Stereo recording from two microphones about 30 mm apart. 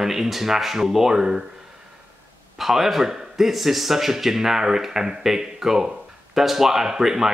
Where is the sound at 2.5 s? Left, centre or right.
Centre.